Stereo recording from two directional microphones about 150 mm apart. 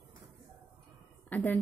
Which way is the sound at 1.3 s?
10° left (ahead or behind).